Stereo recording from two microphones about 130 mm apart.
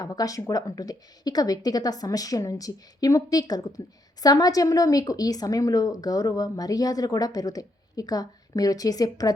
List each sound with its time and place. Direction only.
0.0 s a woman's voice: 30° left (ahead or behind)